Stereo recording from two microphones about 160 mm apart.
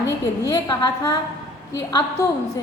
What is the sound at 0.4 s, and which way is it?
A woman's voice, 25° left (ahead or behind).